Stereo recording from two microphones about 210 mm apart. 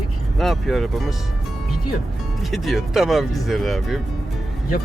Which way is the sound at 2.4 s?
Centre (ahead or behind).